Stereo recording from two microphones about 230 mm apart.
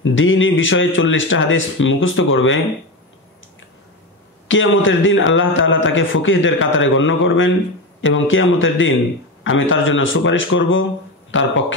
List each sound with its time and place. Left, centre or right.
0.0 s a man's voice: left
4.5 s a man's voice: left